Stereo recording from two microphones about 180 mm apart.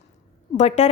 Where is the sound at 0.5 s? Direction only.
40° left (ahead or behind).